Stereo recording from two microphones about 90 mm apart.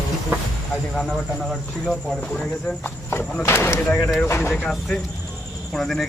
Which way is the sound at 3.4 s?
30° left (ahead or behind).